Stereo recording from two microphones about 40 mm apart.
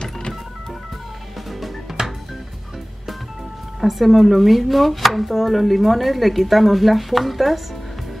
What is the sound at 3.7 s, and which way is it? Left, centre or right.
Speech, centre.